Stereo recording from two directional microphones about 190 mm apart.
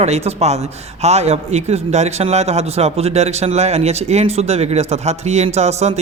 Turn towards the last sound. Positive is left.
turn(degrees=-35)  # may be behind; listen again after turning